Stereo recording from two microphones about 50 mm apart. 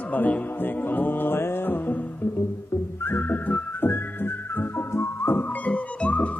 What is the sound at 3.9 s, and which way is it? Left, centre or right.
Music, left.